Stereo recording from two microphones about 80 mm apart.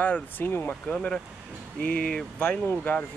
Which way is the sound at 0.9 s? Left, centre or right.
Centre.